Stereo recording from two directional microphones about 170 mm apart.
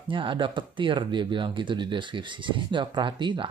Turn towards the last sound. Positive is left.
turn(degrees=-30)  # may be behind; listen again after turning